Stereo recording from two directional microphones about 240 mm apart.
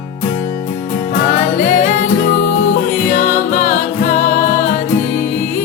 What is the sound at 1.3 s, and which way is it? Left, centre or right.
Music, left.